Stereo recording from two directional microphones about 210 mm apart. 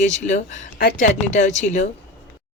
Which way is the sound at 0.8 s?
50° left (ahead or behind).